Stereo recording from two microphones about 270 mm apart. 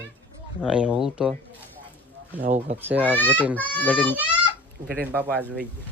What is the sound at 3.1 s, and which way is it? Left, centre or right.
Speech, centre.